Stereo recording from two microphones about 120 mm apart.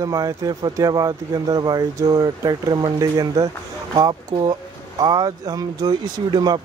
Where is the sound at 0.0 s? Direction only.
30° right (ahead or behind).